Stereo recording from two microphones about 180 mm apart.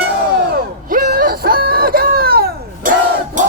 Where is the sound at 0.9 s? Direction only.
55° right (ahead or behind).